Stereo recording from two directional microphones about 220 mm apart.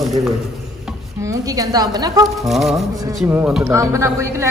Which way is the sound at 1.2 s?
15° right (ahead or behind).